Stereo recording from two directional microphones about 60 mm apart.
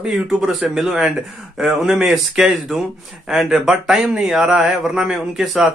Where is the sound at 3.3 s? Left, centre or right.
Centre.